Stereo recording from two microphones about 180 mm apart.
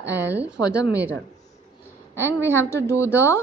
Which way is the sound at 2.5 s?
15° left (ahead or behind).